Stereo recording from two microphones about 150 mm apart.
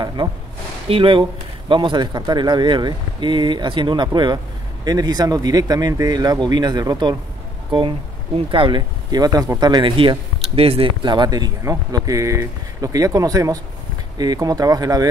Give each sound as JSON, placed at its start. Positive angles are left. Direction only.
{"t": 0.0, "sound": "a sound", "side_deg": -30}
{"t": 0.8, "sound": "speech", "side_deg": -35}
{"t": 8.5, "sound": "speech", "side_deg": -30}